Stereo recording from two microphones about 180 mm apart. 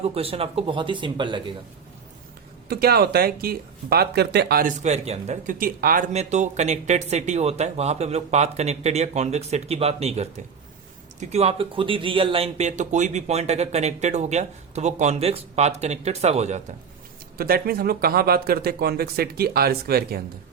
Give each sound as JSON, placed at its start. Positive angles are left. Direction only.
{"t": 0.0, "sound": "speech", "side_deg": -30}
{"t": 2.6, "sound": "speech", "side_deg": -60}
{"t": 4.8, "sound": "speech", "side_deg": -40}
{"t": 6.1, "sound": "speech", "side_deg": -40}
{"t": 17.3, "sound": "speech", "side_deg": -55}